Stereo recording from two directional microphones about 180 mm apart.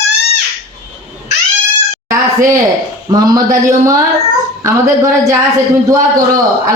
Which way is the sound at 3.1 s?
20° right (ahead or behind).